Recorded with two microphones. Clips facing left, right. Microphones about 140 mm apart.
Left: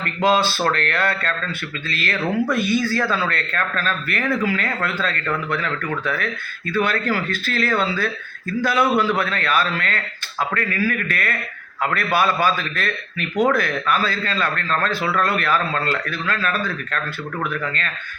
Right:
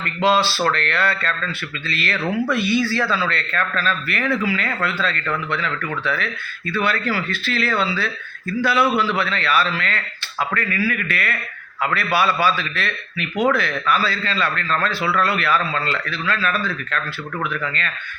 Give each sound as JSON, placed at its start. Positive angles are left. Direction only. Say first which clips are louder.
{"t": 0.0, "sound": "a man's voice", "louder": "even", "side_deg": 45}